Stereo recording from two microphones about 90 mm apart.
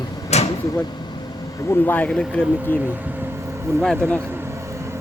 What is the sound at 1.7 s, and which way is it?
Speech, 20° left (ahead or behind).